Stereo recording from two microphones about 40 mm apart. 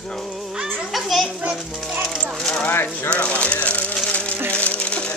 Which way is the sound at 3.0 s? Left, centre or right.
Left.